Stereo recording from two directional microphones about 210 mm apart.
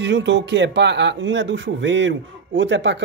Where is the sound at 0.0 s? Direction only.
55° right (ahead or behind).